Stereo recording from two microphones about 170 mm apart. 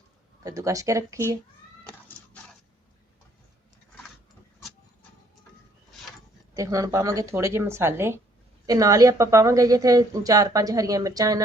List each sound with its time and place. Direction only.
0.4 s speech: 20° right (ahead or behind)
6.5 s speech: 20° right (ahead or behind)